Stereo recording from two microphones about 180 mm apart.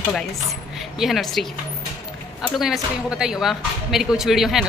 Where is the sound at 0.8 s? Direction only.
Centre (ahead or behind).